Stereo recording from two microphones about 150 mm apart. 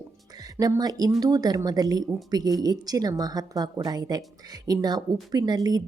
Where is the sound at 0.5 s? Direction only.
20° right (ahead or behind).